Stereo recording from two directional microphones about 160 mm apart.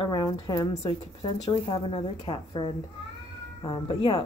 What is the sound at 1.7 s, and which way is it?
A woman's voice, 30° left (ahead or behind).